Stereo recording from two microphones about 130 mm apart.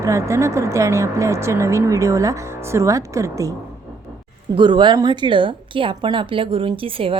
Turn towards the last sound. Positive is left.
turn(degrees=-45)  # may be behind; listen again after turning